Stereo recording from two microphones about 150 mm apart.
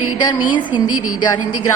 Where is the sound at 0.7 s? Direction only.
30° left (ahead or behind).